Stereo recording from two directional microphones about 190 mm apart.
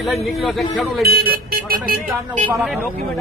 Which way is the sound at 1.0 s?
55° right (ahead or behind).